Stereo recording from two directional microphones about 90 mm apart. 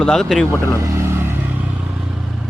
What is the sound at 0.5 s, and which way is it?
Speech, 30° left (ahead or behind).